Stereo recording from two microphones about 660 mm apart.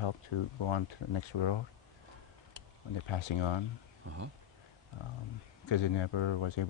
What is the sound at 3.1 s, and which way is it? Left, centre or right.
Speech, left.